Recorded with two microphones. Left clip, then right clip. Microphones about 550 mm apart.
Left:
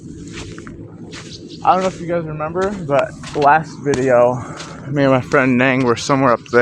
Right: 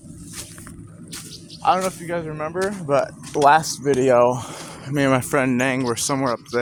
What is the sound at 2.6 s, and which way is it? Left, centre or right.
Speech, right.